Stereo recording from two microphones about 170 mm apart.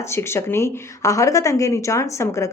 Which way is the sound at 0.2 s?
15° left (ahead or behind).